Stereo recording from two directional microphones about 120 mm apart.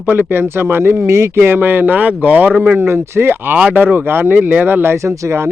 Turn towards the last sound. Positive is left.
turn(degrees=-25)  # may be behind; listen again after turning